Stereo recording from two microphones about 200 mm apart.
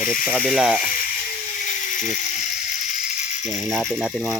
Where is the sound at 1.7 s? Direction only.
40° left (ahead or behind).